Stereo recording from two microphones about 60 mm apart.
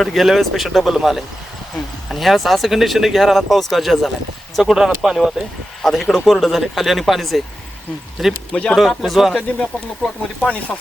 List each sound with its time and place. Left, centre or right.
0.0 s speech: centre
5.8 s speech: centre
10.4 s speech: left